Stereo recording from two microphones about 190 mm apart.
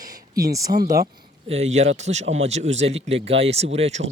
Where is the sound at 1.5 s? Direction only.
35° right (ahead or behind).